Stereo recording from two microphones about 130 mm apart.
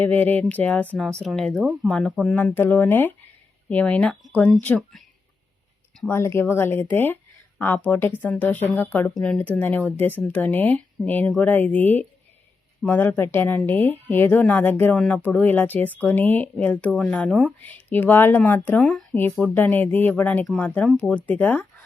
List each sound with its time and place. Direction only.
0.0 s speech: 15° left (ahead or behind)
0.9 s speech: centre (ahead or behind)
6.1 s speech: 20° left (ahead or behind)
14.9 s speech: 5° left (ahead or behind)
15.2 s speech: 15° left (ahead or behind)
18.8 s speech: centre (ahead or behind)
19.5 s speech: 15° left (ahead or behind)